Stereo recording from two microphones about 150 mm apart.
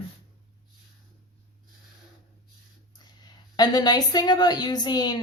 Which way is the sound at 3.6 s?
25° left (ahead or behind).